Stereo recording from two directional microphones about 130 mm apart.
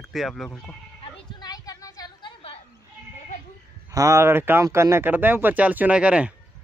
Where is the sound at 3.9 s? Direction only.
25° right (ahead or behind); by 6.3 s 10° right (ahead or behind).